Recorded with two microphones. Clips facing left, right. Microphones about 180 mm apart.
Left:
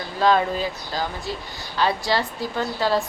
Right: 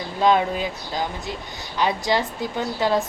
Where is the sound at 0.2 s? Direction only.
15° right (ahead or behind).